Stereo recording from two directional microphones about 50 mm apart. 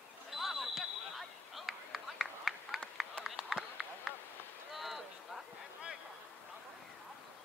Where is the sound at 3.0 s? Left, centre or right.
Centre.